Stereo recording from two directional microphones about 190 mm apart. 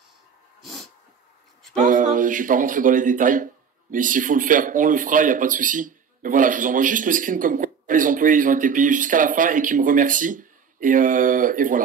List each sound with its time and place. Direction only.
0.6 s dog: centre (ahead or behind)
1.8 s speech: 45° right (ahead or behind)